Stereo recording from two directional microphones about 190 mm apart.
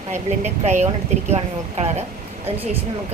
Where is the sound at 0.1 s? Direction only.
35° right (ahead or behind).